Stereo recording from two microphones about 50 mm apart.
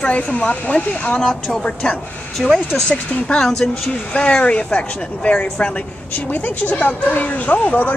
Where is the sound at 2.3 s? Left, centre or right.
Centre.